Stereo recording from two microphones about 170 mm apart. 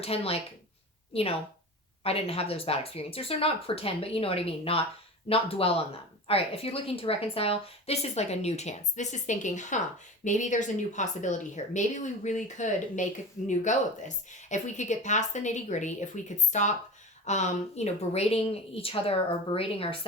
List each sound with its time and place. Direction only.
0.0 s a woman's voice: 35° left (ahead or behind)